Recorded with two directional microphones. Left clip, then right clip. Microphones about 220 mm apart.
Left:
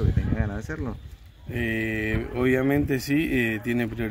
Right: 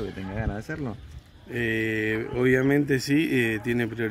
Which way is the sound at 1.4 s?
5° right (ahead or behind).